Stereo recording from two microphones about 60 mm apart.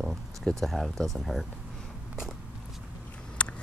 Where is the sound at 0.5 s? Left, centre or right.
Centre.